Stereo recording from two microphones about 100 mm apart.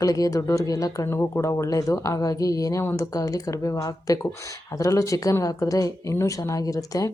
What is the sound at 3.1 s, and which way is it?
Speech, 35° left (ahead or behind).